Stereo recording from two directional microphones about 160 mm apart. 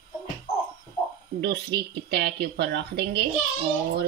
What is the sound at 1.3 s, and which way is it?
Speech, 90° right.